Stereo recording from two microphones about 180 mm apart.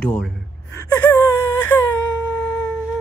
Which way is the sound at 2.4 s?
5° left (ahead or behind).